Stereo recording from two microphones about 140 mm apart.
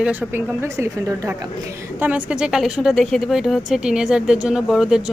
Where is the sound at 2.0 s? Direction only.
10° right (ahead or behind).